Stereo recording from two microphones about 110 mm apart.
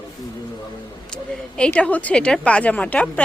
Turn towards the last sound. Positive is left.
turn(degrees=15)  # may be behind; listen again after turning